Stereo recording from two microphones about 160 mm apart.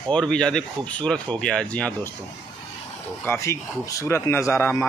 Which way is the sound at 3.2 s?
15° left (ahead or behind).